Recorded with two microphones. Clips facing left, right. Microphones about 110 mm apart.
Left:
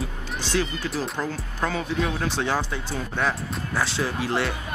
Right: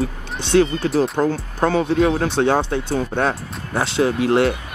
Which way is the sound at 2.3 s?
60° right (ahead or behind).